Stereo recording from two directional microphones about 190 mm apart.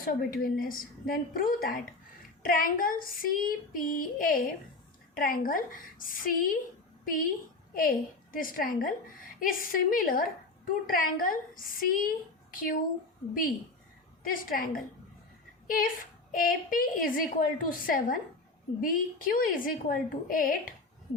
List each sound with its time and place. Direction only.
0.0 s female singing: 50° left (ahead or behind)
7.0 s a woman's voice: 45° left (ahead or behind)
7.7 s female singing: 45° left (ahead or behind)
14.3 s female singing: 50° left (ahead or behind)
15.6 s a woman's voice: 45° left (ahead or behind)
16.3 s female singing: 50° left (ahead or behind)